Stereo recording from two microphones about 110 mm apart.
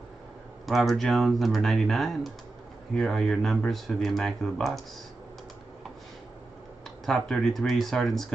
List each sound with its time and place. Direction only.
0.7 s speech: centre (ahead or behind)
7.1 s speech: centre (ahead or behind)